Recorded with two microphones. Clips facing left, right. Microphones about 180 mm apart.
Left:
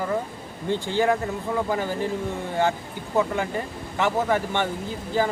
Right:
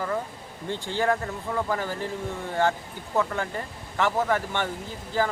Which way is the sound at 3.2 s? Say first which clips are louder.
Left 3 dB; 15° left (ahead or behind).